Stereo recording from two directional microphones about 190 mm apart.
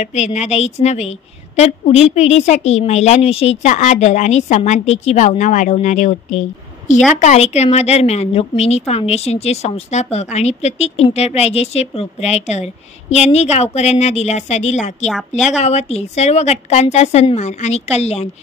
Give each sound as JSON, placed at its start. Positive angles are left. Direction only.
{"t": 0.0, "sound": "a woman's voice", "side_deg": 35}
{"t": 15.0, "sound": "a woman's voice", "side_deg": 0}
{"t": 15.6, "sound": "a woman's voice", "side_deg": 35}